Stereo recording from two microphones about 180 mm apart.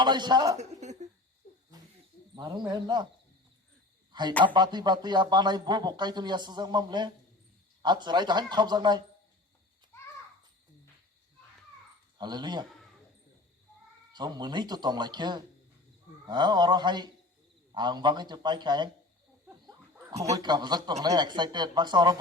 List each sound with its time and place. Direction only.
0.0 s a man's voice: 25° right (ahead or behind)
0.5 s speech: 40° right (ahead or behind)
1.5 s a sound: 40° left (ahead or behind)
2.3 s a man's voice: 25° right (ahead or behind)
4.1 s a man's voice: 25° right (ahead or behind)
9.9 s children playing: 15° left (ahead or behind)
12.1 s speech: 25° right (ahead or behind)
14.1 s a man's voice: 25° right (ahead or behind)
20.3 s a man's voice: 25° right (ahead or behind)